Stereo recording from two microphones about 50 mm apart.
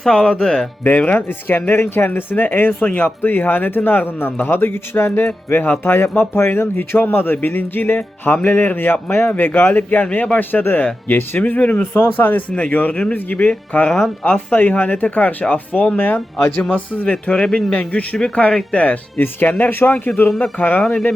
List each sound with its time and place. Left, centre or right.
0.0 s speech: centre
0.9 s speech: left
5.2 s speech: left
9.3 s speech: left
10.5 s speech: left
17.1 s speech: centre
17.7 s speech: left